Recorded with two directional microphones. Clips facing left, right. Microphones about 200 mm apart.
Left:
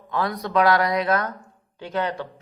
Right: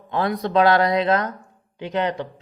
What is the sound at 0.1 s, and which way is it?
A man's voice, 25° right (ahead or behind).